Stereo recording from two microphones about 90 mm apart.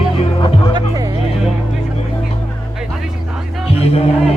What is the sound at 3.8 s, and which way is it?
Music, 90° left.